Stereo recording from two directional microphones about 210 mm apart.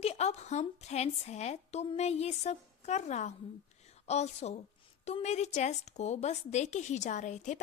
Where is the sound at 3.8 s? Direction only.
30° left (ahead or behind).